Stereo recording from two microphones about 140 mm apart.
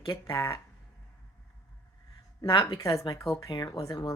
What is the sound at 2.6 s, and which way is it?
Speech, 25° left (ahead or behind).